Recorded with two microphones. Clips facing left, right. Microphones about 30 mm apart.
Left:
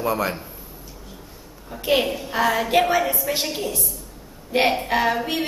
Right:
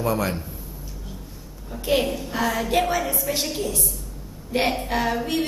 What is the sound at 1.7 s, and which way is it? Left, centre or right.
A woman's voice, centre.